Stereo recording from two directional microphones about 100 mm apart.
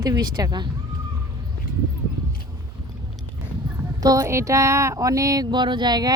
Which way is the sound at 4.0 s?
35° right (ahead or behind).